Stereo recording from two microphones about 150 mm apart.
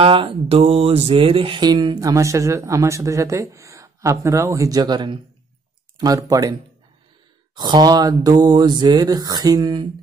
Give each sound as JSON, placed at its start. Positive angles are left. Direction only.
{"t": 0.0, "sound": "music", "side_deg": -35}